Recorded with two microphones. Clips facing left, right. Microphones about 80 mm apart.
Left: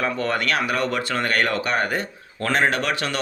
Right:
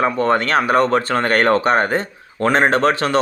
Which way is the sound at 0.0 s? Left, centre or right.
Right.